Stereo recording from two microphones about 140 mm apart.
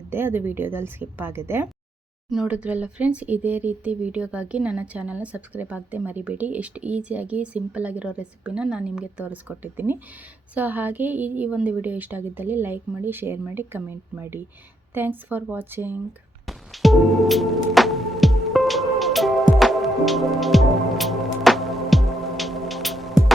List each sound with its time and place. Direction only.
0.1 s speech: 15° right (ahead or behind)
16.5 s music: centre (ahead or behind)